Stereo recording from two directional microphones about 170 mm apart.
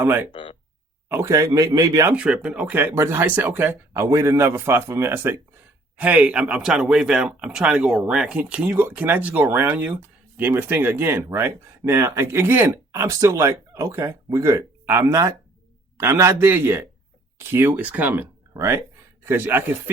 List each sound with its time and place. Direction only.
0.0 s speech: 10° right (ahead or behind)
0.3 s speech: 30° left (ahead or behind)
1.0 s speech: 15° right (ahead or behind)
2.1 s a man's voice: 5° right (ahead or behind)